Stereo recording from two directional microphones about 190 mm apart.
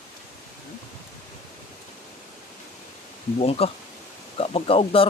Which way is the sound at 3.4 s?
30° left (ahead or behind).